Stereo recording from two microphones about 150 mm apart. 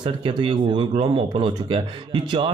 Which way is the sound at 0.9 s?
45° right (ahead or behind).